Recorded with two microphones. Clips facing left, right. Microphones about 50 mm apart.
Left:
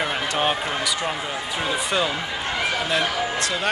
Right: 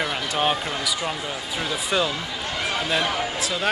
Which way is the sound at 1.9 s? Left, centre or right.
Centre.